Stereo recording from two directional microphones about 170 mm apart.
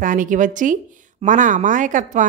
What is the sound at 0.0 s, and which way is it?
Speech, 50° right (ahead or behind).